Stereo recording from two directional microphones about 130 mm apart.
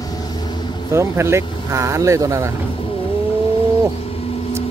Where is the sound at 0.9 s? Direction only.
20° right (ahead or behind).